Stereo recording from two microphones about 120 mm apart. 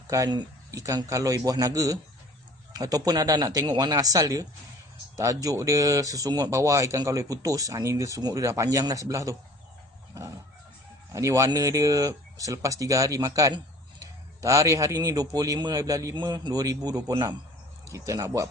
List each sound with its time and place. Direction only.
0.1 s a man's voice: 35° right (ahead or behind)
11.1 s a man's voice: 25° right (ahead or behind)
16.1 s a man's voice: 40° right (ahead or behind)